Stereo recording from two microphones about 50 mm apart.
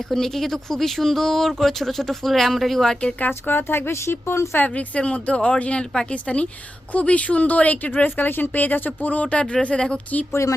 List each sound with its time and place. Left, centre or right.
0.1 s speech: centre
3.2 s speech: left
4.7 s speech: left
10.4 s speech: left